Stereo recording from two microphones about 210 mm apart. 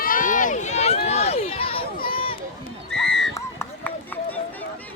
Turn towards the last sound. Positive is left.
turn(degrees=10)  # may be behind; listen again after turning